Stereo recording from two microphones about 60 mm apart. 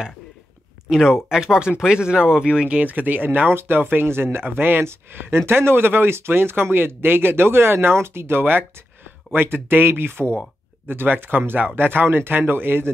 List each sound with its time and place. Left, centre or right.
0.8 s speech: centre; by 12.9 s right